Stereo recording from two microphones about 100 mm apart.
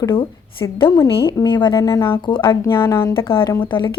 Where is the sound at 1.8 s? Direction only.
35° left (ahead or behind).